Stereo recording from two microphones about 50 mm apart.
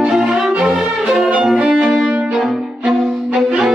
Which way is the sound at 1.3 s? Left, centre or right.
Centre.